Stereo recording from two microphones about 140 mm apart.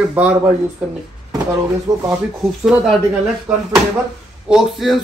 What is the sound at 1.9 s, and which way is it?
Speech, 30° right (ahead or behind).